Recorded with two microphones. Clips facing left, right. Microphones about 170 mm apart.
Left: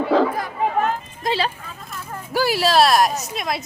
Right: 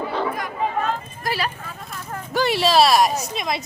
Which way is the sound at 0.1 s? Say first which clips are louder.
Left 10 dB; 90° left.